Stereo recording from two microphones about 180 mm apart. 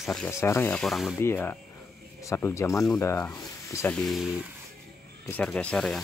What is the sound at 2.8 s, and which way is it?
Speech, 5° left (ahead or behind).